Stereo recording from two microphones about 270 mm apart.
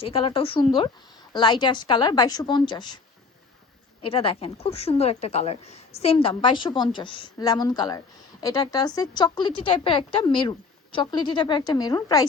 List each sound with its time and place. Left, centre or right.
0.0 s a woman's voice: centre
4.0 s a woman's voice: centre